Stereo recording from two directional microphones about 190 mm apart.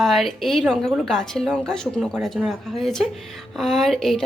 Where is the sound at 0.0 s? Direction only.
Centre (ahead or behind).